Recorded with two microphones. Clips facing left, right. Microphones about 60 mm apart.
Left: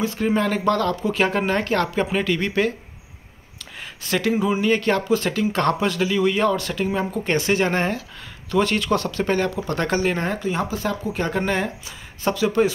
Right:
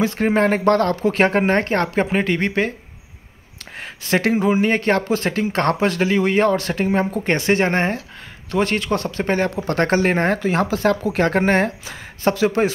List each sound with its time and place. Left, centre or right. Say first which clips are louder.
0.0 s speech: right 4 dB; right
3.7 s speech: right 4 dB; right
9.7 s speech: right 4 dB; right